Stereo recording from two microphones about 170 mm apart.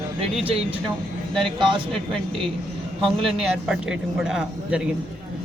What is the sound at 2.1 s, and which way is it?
Speech, 30° right (ahead or behind).